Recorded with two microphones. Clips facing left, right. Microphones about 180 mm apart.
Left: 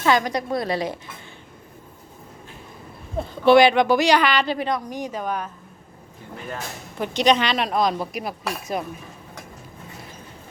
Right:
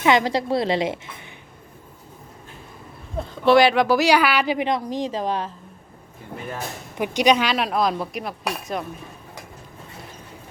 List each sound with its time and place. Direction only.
0.0 s a woman's voice: 25° right (ahead or behind)
3.2 s a woman's voice: centre (ahead or behind); by 5.5 s 30° right (ahead or behind)
6.9 s speech: 10° right (ahead or behind); by 8.8 s 5° left (ahead or behind)